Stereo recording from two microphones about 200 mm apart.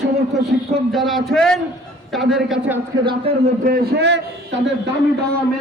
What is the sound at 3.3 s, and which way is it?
Speech, 30° right (ahead or behind).